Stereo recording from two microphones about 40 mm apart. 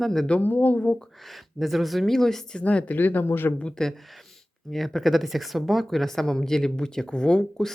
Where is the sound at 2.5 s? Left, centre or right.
Left.